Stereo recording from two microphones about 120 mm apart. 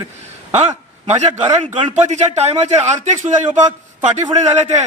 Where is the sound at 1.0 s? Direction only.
70° right (ahead or behind); by 3.6 s 85° right.